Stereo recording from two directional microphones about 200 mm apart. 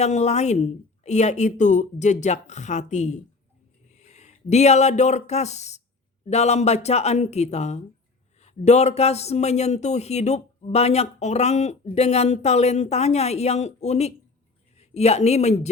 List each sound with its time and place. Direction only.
0.0 s speech: 35° left (ahead or behind)